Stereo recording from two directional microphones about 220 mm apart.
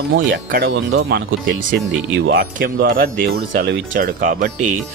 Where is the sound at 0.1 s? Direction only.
40° right (ahead or behind).